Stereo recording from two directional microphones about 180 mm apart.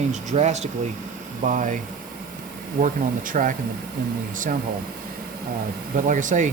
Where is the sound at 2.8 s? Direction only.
50° right (ahead or behind).